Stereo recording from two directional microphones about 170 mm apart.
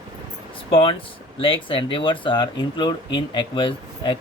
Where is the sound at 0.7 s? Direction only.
30° left (ahead or behind).